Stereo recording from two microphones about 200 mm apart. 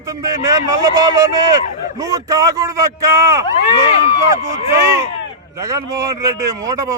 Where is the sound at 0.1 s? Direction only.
15° right (ahead or behind).